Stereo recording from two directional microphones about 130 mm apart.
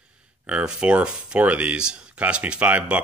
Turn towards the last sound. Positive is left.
turn(degrees=-10)  # may be behind; listen again after turning